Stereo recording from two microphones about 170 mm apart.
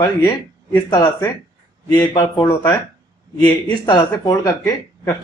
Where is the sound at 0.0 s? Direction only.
20° left (ahead or behind).